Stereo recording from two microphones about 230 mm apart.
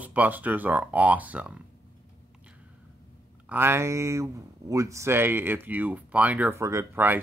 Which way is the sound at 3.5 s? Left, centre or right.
Centre.